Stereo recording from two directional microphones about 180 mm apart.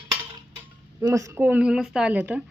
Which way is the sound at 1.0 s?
15° right (ahead or behind).